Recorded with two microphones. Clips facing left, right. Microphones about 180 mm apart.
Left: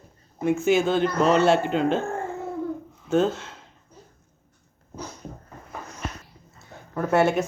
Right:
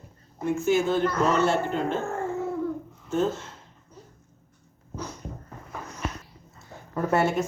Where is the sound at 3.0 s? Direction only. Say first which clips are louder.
Left 4 dB; 85° left.